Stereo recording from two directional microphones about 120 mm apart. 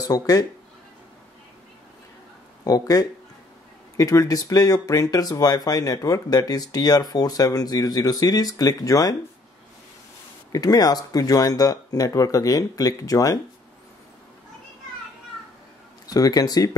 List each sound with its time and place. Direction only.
0.0 s speech: 30° left (ahead or behind)
2.6 s speech: 30° left (ahead or behind)
10.5 s speech: 30° left (ahead or behind)
16.1 s speech: 30° left (ahead or behind)